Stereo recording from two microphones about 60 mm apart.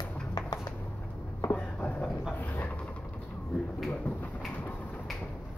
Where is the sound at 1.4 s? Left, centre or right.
Left.